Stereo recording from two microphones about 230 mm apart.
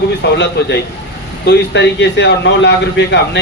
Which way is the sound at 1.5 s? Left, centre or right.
Left.